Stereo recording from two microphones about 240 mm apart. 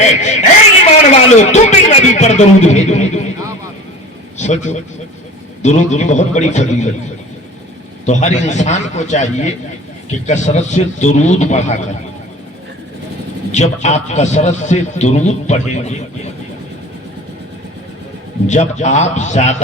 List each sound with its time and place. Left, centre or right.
0.0 s a man's voice: left
4.4 s a man's voice: left
8.0 s a man's voice: left
13.5 s a man's voice: left
18.4 s a man's voice: left